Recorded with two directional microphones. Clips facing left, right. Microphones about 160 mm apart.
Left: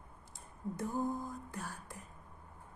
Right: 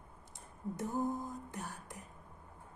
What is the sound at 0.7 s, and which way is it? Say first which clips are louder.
Speech: even; 20° right (ahead or behind).